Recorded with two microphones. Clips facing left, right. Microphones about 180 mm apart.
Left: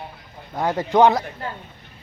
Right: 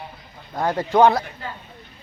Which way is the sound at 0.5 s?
15° left (ahead or behind).